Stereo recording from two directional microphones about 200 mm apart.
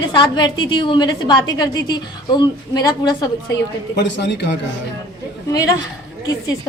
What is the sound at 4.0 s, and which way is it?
Speech, 60° left (ahead or behind).